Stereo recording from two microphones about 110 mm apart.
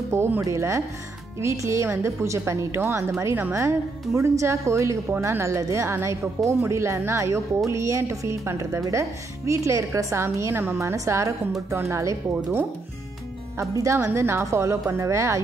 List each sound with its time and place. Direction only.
0.1 s a woman's voice: 25° right (ahead or behind)
13.6 s a woman's voice: 25° right (ahead or behind)